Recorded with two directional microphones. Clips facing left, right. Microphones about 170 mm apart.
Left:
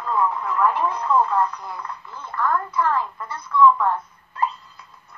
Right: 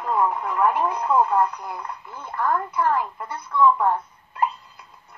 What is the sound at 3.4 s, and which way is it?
Speech, 25° right (ahead or behind).